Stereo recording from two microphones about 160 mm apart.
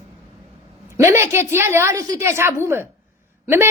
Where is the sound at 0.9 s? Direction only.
15° right (ahead or behind).